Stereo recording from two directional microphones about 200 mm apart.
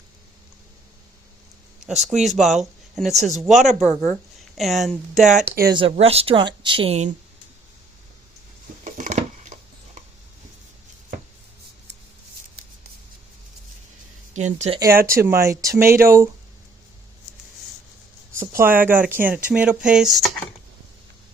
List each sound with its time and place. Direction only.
2.0 s speech: centre (ahead or behind)
5.4 s speech: 50° right (ahead or behind)
5.7 s speech: 30° right (ahead or behind)
8.8 s a sound: 35° right (ahead or behind)
14.3 s speech: 35° right (ahead or behind)
15.0 s speech: 15° right (ahead or behind)
18.3 s speech: 10° right (ahead or behind)